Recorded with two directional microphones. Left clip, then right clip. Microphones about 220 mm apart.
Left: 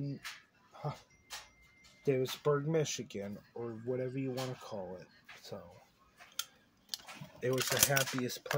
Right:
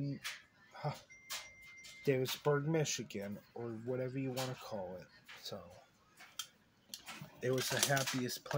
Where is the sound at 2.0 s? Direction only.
Centre (ahead or behind).